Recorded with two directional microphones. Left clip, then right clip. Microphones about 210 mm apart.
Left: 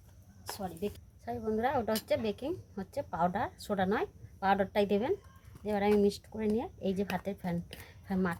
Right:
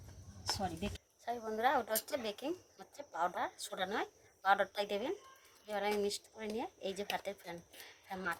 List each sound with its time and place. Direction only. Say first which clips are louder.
0.4 s a woman's voice: left 1 dB; 30° left (ahead or behind)